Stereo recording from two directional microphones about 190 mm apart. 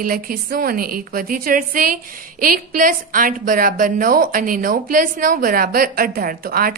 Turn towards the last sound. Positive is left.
turn(degrees=-50)  # may be behind; listen again after turning